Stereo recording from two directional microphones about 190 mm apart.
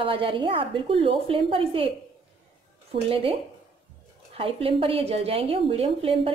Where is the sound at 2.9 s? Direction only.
30° right (ahead or behind).